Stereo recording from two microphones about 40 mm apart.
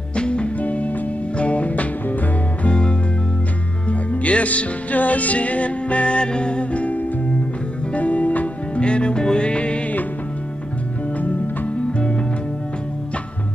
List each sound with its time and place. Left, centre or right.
0.1 s music: left
2.6 s music: left
8.8 s music: left
11.1 s music: left